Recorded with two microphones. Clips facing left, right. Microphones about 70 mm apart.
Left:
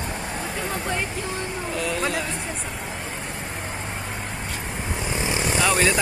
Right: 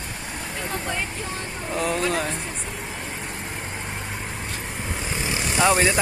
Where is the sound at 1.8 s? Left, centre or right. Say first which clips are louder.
Right 3 dB; right.